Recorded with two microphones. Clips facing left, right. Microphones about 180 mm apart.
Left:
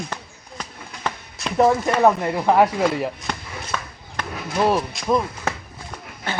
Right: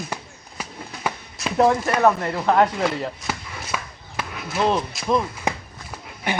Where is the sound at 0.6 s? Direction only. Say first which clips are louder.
Right 1 dB; 5° right (ahead or behind).